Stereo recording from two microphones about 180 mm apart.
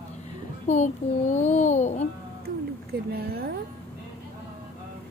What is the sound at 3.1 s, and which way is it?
Speech, 55° right (ahead or behind).